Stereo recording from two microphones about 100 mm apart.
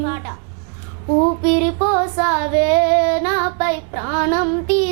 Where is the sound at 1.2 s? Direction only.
20° right (ahead or behind).